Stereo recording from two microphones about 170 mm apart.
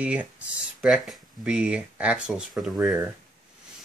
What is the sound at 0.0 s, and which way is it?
Speech, 10° right (ahead or behind).